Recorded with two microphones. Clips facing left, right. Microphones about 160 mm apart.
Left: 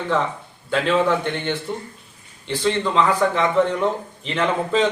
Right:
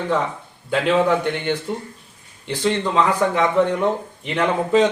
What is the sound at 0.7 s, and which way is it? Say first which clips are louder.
A man's voice: right 1 dB; 10° right (ahead or behind).